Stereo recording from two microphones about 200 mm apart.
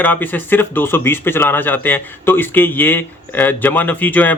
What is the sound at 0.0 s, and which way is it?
Speech, 10° left (ahead or behind).